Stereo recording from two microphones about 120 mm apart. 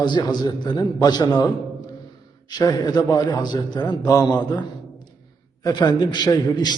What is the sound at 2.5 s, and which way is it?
A man's voice, 35° left (ahead or behind).